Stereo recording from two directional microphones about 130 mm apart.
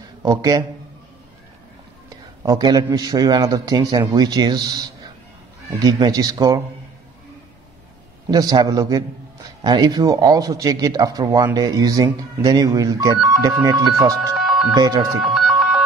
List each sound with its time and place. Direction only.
0.2 s speech: 25° right (ahead or behind)
2.0 s a man's voice: 25° right (ahead or behind)
8.3 s speech: 30° right (ahead or behind)
14.3 s music: centre (ahead or behind)
14.8 s speech: 30° right (ahead or behind)
15.2 s a sound: centre (ahead or behind)